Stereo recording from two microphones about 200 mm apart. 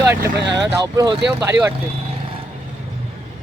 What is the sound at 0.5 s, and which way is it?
Speech, 20° right (ahead or behind).